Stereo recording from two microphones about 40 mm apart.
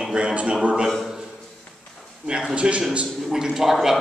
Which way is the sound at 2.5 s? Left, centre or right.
Right.